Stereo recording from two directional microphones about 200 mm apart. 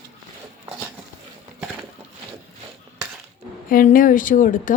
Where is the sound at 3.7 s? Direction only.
45° left (ahead or behind).